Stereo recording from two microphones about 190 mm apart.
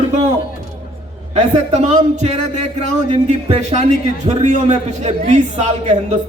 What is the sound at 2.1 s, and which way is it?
A man's voice, 35° right (ahead or behind).